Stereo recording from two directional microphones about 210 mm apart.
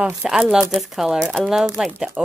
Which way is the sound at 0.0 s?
5° right (ahead or behind).